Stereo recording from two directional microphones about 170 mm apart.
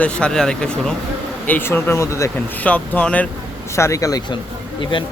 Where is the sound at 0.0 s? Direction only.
5° left (ahead or behind).